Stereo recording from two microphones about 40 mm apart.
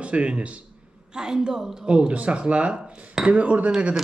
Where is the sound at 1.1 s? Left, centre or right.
Centre.